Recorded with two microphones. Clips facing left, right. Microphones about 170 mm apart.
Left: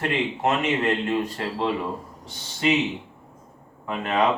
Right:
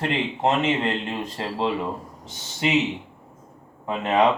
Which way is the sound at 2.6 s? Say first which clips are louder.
Even; 20° right (ahead or behind).